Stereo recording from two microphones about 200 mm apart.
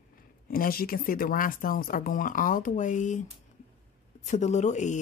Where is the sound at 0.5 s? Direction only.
45° left (ahead or behind).